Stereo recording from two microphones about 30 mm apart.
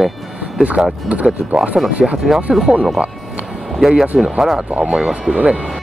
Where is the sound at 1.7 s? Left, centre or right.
Centre.